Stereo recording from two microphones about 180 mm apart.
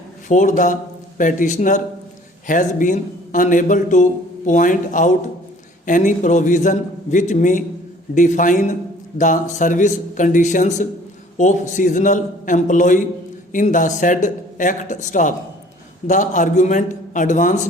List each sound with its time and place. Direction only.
0.3 s a man's voice: 45° left (ahead or behind)